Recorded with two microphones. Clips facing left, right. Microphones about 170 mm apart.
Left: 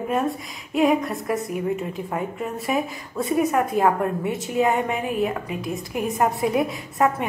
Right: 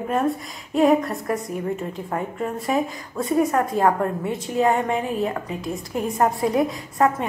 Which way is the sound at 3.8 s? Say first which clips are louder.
Even; 20° left (ahead or behind).